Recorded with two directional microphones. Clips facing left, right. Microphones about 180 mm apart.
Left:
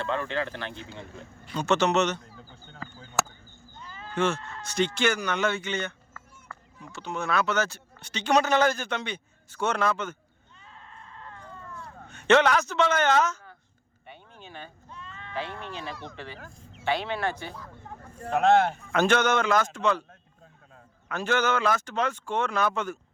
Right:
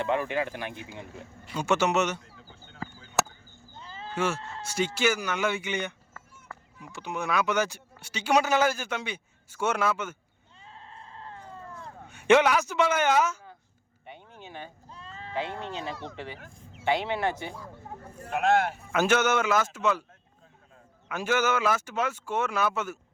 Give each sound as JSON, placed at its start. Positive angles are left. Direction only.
{"t": 0.0, "sound": "a man's voice", "side_deg": -15}
{"t": 3.8, "sound": "cat", "side_deg": -30}
{"t": 4.1, "sound": "speech", "side_deg": -5}
{"t": 4.4, "sound": "speech", "side_deg": -25}
{"t": 4.6, "sound": "a man's voice", "side_deg": -10}
{"t": 10.6, "sound": "sheep", "side_deg": -30}
{"t": 12.0, "sound": "a man's voice", "side_deg": -10}
{"t": 14.1, "sound": "a sound", "side_deg": -15}
{"t": 14.8, "sound": "bleat", "side_deg": -30}
{"t": 15.4, "sound": "a man's voice", "side_deg": -20}
{"t": 21.1, "sound": "a man's voice", "side_deg": -10}